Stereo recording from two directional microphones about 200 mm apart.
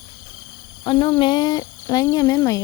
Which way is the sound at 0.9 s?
20° left (ahead or behind).